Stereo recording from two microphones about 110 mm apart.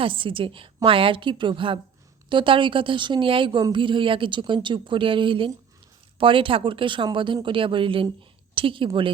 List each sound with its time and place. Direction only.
0.0 s a woman's voice: 50° right (ahead or behind)